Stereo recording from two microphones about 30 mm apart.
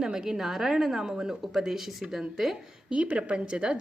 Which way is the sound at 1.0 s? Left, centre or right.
Right.